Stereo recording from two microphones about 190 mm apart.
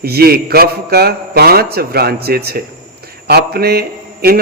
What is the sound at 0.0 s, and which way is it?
A man's voice, 55° right (ahead or behind).